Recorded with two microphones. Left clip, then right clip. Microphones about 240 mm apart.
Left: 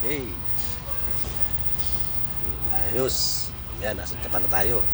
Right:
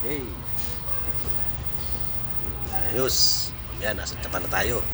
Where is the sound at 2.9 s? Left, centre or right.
Centre.